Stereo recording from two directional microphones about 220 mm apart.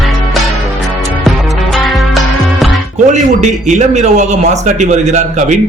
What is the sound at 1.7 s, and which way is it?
Music, centre (ahead or behind).